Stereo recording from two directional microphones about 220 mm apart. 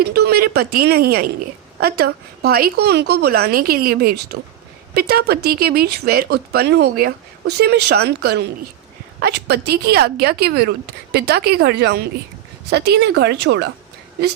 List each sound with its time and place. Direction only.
0.0 s speech: 45° right (ahead or behind)